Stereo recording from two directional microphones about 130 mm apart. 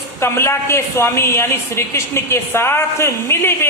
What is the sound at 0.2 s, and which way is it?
A woman's voice, 20° left (ahead or behind).